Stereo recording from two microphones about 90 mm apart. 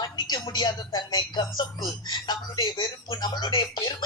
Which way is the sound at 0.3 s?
50° left (ahead or behind).